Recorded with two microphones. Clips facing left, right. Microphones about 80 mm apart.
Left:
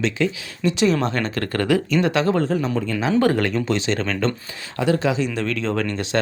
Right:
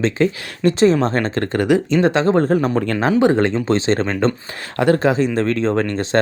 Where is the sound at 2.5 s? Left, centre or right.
Right.